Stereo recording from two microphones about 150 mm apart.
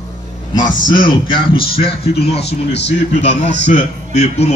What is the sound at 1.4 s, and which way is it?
Speech, 35° left (ahead or behind).